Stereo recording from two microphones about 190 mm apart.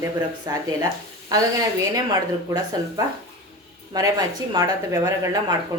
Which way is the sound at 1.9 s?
20° right (ahead or behind).